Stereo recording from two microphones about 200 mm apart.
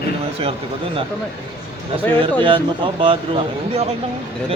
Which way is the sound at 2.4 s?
25° right (ahead or behind).